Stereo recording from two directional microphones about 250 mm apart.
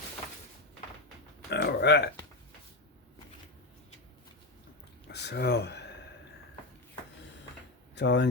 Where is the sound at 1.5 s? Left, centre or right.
Left.